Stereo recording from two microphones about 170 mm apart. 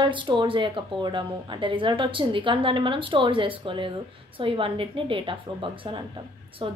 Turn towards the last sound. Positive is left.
turn(degrees=-30)  # may be behind; listen again after turning